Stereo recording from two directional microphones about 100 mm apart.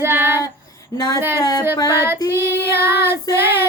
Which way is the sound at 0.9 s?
40° left (ahead or behind).